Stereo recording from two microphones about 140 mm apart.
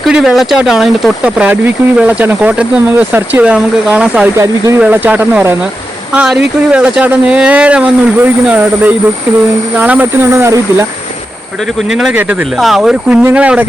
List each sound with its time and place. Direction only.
0.1 s speech: 5° right (ahead or behind)
4.4 s speech: 20° right (ahead or behind)
4.8 s speech: 10° right (ahead or behind)
11.9 s speech: 5° right (ahead or behind)